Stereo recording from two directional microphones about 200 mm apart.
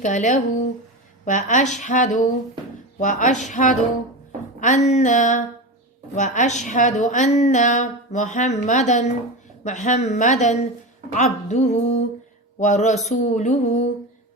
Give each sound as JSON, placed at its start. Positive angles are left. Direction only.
{"t": 0.0, "sound": "a woman's voice", "side_deg": 35}
{"t": 12.5, "sound": "a sound", "side_deg": 35}
{"t": 13.1, "sound": "a woman's voice", "side_deg": 35}